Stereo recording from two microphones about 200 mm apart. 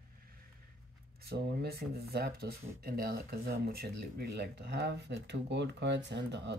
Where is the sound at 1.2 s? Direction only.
50° right (ahead or behind).